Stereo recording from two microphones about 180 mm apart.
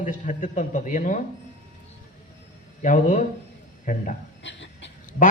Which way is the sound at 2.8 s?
45° left (ahead or behind).